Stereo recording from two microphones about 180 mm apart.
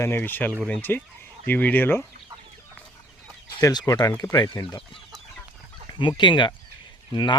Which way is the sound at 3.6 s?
20° left (ahead or behind).